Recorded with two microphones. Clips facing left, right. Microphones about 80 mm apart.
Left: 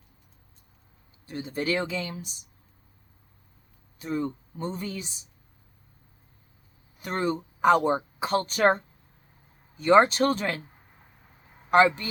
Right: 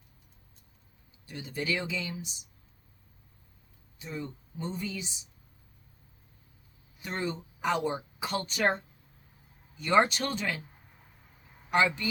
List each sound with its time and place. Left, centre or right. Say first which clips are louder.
1.3 s speech: left 5 dB; left
3.9 s speech: left 9 dB; left
7.0 s speech: left 6 dB; left
9.7 s speech: left 6 dB; left
11.7 s speech: left 7 dB; left